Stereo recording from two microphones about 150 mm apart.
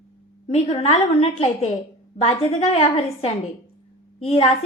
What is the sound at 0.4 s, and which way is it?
A woman's voice, 45° left (ahead or behind).